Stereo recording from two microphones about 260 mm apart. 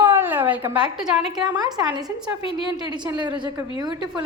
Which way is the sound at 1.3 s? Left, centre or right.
Centre.